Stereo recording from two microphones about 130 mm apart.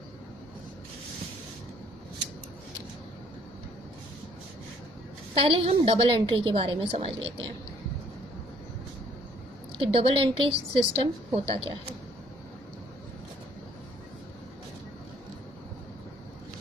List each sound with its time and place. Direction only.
5.4 s a woman's voice: 45° right (ahead or behind)
9.7 s a woman's voice: 50° right (ahead or behind)